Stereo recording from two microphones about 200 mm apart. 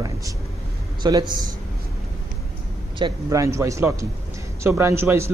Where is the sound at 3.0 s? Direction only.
15° right (ahead or behind).